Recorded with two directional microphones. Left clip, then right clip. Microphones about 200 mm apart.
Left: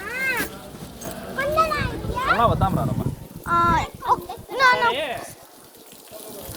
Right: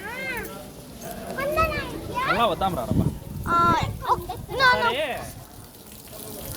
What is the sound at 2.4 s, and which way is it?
Speech, 5° left (ahead or behind).